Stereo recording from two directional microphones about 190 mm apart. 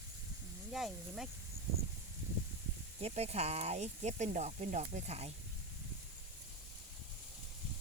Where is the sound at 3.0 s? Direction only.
35° right (ahead or behind).